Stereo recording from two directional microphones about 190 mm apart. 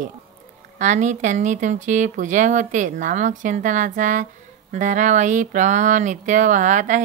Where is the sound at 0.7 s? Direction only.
40° right (ahead or behind).